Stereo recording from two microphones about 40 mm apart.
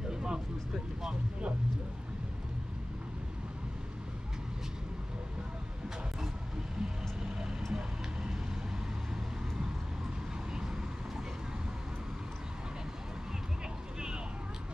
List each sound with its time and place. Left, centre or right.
0.1 s vehicle: centre
6.8 s vehicle: centre